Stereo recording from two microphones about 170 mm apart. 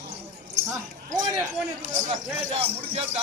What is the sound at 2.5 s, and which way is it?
Speech, 35° right (ahead or behind).